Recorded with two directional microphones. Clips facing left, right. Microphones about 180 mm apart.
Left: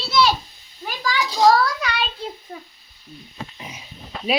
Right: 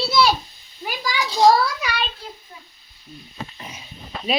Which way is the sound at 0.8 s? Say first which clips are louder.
Left 1 dB; 10° right (ahead or behind).